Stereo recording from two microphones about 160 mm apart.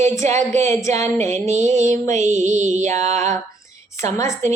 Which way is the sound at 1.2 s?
45° right (ahead or behind).